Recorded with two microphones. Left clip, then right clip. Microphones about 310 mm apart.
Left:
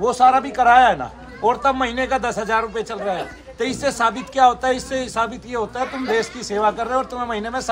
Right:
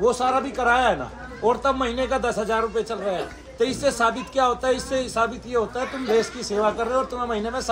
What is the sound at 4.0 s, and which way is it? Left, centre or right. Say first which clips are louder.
Speech: left 3 dB; left.